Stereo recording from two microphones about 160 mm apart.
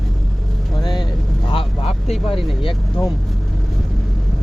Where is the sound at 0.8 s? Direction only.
30° left (ahead or behind).